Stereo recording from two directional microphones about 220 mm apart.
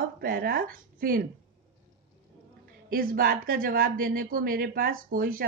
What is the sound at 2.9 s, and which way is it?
A woman's voice, 40° right (ahead or behind).